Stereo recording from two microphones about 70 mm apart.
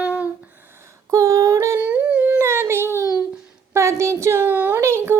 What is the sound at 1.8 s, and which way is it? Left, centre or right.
Humming, centre.